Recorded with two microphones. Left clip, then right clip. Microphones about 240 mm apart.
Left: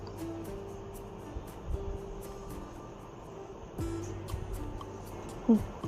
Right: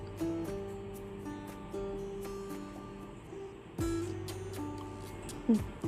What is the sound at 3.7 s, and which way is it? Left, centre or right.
Music, centre.